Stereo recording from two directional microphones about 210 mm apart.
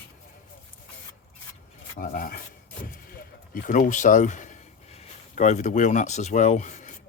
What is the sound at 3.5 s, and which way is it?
Speech, 40° left (ahead or behind).